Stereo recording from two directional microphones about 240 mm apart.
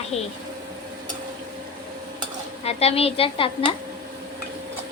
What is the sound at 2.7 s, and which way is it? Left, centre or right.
Speech, left.